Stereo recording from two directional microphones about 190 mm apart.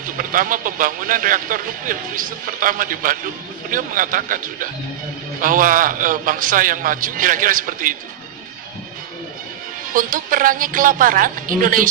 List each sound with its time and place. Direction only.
0.0 s a man's voice: 45° right (ahead or behind)
9.9 s a man's voice: 45° right (ahead or behind)